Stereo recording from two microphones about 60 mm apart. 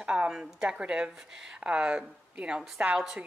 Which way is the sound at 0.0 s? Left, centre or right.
Right.